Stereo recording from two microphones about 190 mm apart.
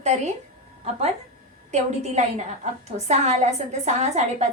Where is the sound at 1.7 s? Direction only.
35° right (ahead or behind).